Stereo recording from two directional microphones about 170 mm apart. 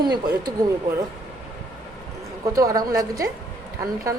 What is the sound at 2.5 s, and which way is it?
Speech, 20° right (ahead or behind).